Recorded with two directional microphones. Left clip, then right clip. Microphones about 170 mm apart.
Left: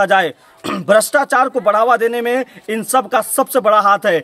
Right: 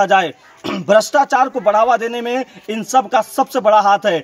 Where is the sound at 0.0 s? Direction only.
10° left (ahead or behind).